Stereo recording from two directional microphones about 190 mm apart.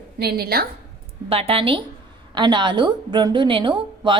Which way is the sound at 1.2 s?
30° right (ahead or behind).